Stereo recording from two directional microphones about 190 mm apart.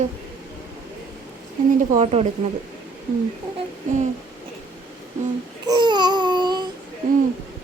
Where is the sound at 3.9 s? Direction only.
40° right (ahead or behind).